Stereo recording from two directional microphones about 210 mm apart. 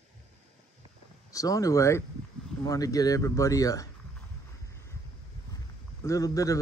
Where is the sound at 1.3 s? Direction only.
15° left (ahead or behind).